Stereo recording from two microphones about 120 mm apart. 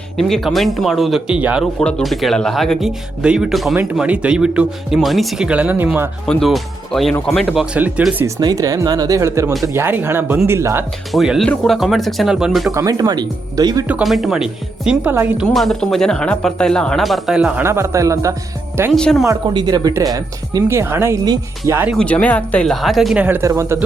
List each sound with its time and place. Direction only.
0.2 s speech: centre (ahead or behind)
1.8 s speech: 5° left (ahead or behind); by 6.1 s 15° right (ahead or behind)
6.2 s speech: centre (ahead or behind)
7.6 s speech: 10° right (ahead or behind)
8.4 s speech: 35° right (ahead or behind)
11.1 s speech: centre (ahead or behind)
12.7 s speech: 30° right (ahead or behind)
14.0 s speech: centre (ahead or behind)
17.6 s speech: 20° right (ahead or behind)
18.9 s speech: 5° left (ahead or behind)
19.5 s speech: 35° right (ahead or behind)
20.7 s speech: 20° right (ahead or behind)
21.9 s speech: 10° left (ahead or behind)
23.1 s speech: 15° right (ahead or behind)